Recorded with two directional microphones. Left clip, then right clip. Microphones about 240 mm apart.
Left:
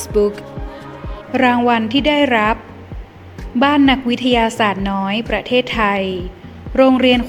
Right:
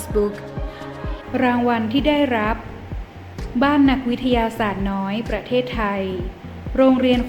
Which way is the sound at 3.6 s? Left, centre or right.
Left.